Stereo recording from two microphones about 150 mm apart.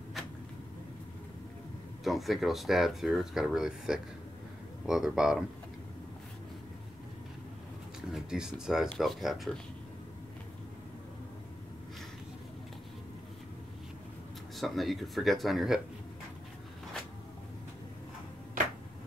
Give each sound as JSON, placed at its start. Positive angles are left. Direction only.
{"t": 2.0, "sound": "speech", "side_deg": 0}
{"t": 8.1, "sound": "speech", "side_deg": -5}
{"t": 14.6, "sound": "speech", "side_deg": 0}
{"t": 18.6, "sound": "a sound", "side_deg": -65}